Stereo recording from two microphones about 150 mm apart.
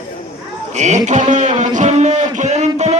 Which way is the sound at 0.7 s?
50° right (ahead or behind).